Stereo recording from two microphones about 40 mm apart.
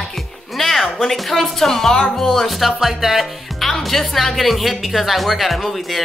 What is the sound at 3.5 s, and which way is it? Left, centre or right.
Speech, centre.